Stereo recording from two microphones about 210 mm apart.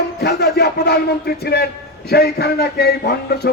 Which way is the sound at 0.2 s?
50° left (ahead or behind).